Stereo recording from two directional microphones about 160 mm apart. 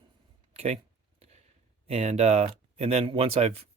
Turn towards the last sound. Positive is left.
turn(degrees=-40)  # may be behind; listen again after turning